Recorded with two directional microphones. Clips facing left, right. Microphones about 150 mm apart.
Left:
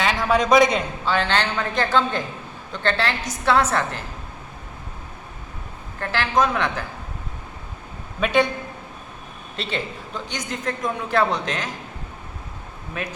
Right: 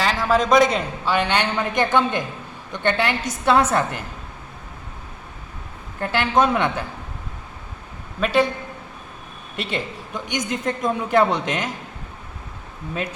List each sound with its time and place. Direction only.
0.0 s a man's voice: centre (ahead or behind)
1.0 s a man's voice: 10° right (ahead or behind)
6.0 s a man's voice: 25° right (ahead or behind)
8.2 s a man's voice: centre (ahead or behind)
9.6 s a man's voice: 10° right (ahead or behind)